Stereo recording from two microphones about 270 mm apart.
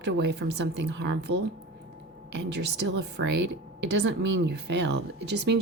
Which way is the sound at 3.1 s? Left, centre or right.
Right.